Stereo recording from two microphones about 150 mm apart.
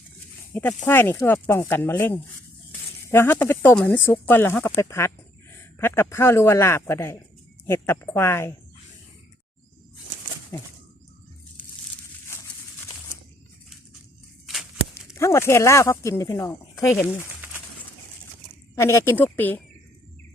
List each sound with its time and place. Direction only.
0.5 s speech: 10° left (ahead or behind)
10.5 s speech: 15° left (ahead or behind)
14.4 s a sound: centre (ahead or behind)
15.1 s speech: 20° left (ahead or behind)
18.8 s speech: 20° left (ahead or behind)